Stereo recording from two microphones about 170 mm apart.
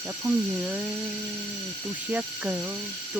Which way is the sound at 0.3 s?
5° right (ahead or behind).